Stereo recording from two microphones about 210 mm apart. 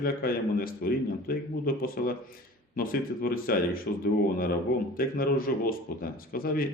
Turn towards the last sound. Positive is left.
turn(degrees=45)  # may be behind; listen again after turning